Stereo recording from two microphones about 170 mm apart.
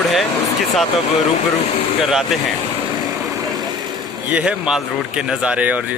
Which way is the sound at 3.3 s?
20° right (ahead or behind).